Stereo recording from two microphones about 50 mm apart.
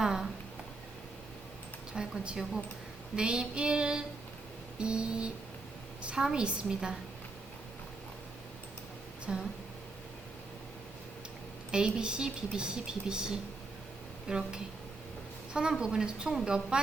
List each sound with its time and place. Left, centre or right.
0.0 s a sound: centre
1.9 s a woman's voice: centre
3.2 s child singing: centre
6.1 s a woman's voice: centre
9.2 s speech: centre
11.7 s a woman's voice: centre
15.8 s a woman's voice: centre